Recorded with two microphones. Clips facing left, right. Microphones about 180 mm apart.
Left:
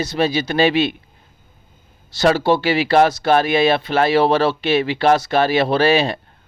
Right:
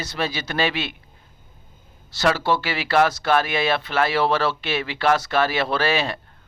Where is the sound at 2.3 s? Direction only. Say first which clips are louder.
Left 7 dB; 15° left (ahead or behind).